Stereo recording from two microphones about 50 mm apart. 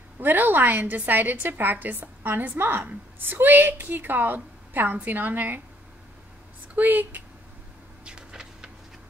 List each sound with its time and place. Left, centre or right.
0.2 s a woman's voice: right
6.8 s a woman's voice: right
8.0 s a sound: centre